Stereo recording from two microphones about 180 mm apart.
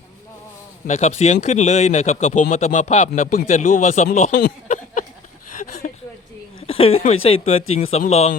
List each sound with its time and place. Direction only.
0.9 s speech: 40° left (ahead or behind)
5.5 s a sound: 40° left (ahead or behind)
6.6 s speech: 30° left (ahead or behind)